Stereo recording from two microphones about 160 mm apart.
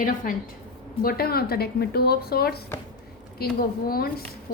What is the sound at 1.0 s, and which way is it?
A woman's voice, 75° left (ahead or behind).